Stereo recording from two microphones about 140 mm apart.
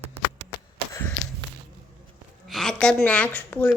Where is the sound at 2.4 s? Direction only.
Centre (ahead or behind).